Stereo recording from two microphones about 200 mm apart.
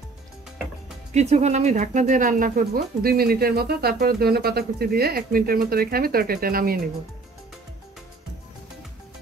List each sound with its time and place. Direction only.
1.1 s speech: 35° right (ahead or behind)